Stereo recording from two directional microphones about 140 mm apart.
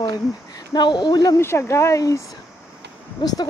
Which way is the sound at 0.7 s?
30° left (ahead or behind).